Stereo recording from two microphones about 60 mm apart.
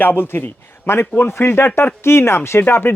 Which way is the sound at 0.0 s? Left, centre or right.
Left.